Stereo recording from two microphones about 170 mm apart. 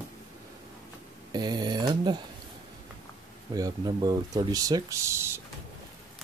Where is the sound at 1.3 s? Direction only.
25° right (ahead or behind).